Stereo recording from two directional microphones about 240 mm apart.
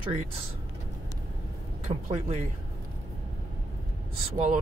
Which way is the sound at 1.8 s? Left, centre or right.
Right.